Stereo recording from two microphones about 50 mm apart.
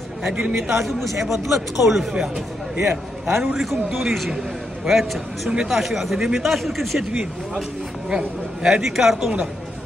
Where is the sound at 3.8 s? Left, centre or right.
Centre.